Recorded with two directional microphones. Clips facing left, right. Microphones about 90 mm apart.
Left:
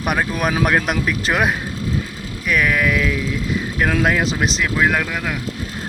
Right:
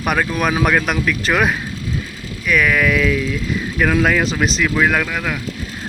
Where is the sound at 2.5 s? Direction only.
15° left (ahead or behind).